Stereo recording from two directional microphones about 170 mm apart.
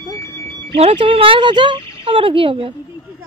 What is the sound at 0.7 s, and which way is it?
Speech, 35° right (ahead or behind).